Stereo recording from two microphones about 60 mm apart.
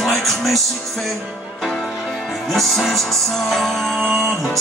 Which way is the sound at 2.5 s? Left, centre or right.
Centre.